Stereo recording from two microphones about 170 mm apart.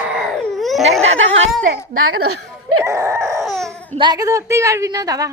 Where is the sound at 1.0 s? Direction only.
40° right (ahead or behind).